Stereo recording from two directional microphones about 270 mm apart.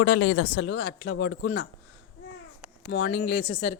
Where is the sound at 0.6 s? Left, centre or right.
Left.